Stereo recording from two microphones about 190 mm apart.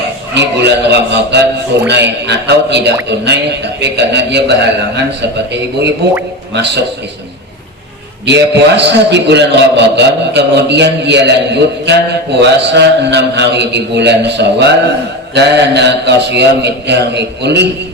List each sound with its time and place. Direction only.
0.3 s a man's voice: 65° right (ahead or behind)
8.3 s a man's voice: 65° right (ahead or behind)